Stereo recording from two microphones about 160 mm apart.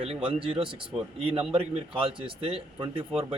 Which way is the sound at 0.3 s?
35° right (ahead or behind).